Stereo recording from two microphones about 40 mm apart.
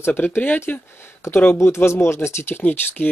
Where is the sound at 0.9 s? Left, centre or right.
Left.